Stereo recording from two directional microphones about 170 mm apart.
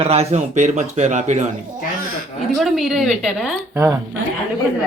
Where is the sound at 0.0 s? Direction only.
40° right (ahead or behind).